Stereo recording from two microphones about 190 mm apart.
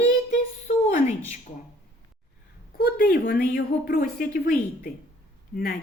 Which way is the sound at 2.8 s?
55° left (ahead or behind).